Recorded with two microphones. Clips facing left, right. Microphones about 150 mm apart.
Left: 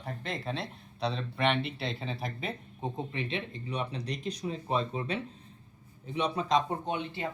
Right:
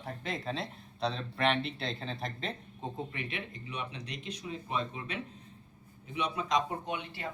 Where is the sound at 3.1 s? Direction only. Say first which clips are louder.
Left 5 dB; 25° left (ahead or behind).